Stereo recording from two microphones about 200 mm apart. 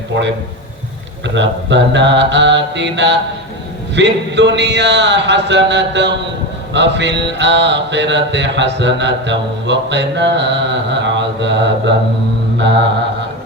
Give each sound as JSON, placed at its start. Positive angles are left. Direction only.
{"t": 1.4, "sound": "mantra", "side_deg": -60}